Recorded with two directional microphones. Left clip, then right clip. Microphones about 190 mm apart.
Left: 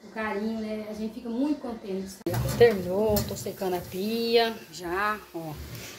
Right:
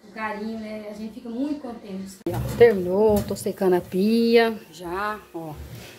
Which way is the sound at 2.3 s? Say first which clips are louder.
Right 4 dB; 30° right (ahead or behind).